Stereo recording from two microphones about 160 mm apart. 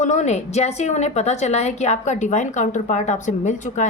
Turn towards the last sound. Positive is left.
turn(degrees=50)  # may be behind; listen again after turning